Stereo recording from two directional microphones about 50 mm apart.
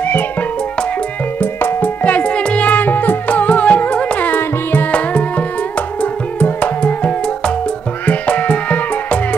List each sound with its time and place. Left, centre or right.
0.0 s music: left
2.0 s music: left
4.9 s music: left